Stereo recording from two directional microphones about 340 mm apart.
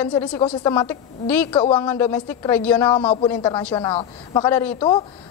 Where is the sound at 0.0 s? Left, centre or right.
Centre.